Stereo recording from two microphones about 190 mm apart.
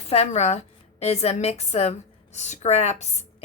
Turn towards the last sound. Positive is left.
turn(degrees=35)  # may be behind; listen again after turning